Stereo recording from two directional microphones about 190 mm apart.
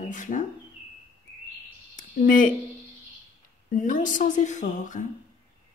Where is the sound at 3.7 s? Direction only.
45° left (ahead or behind).